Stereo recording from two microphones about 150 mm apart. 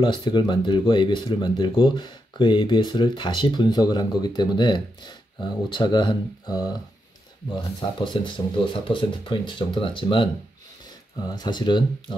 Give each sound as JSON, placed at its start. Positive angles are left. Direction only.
{"t": 0.0, "sound": "speech", "side_deg": 30}
{"t": 11.2, "sound": "speech", "side_deg": 25}